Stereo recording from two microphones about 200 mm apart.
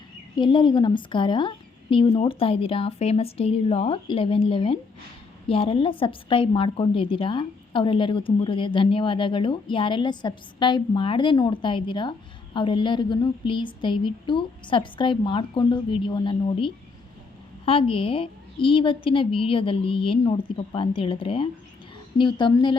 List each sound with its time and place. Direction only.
0.3 s a woman's voice: 25° left (ahead or behind)